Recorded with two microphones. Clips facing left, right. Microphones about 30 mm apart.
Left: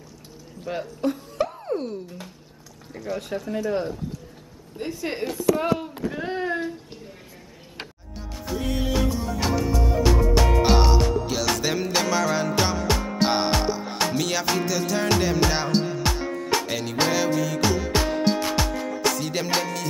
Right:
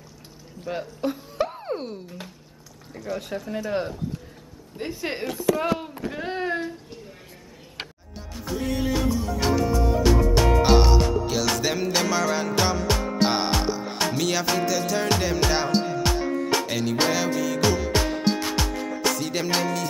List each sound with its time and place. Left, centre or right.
0.7 s speech: centre
1.0 s a sound: centre
1.5 s music: right
2.9 s speech: centre
4.7 s a woman's voice: centre
6.1 s a sound: centre
8.5 s music: centre